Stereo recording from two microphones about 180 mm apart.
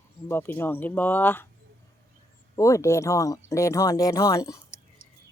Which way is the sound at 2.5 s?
15° left (ahead or behind).